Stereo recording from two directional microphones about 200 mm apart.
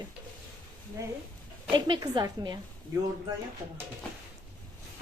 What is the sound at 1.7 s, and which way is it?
Speech, 20° right (ahead or behind).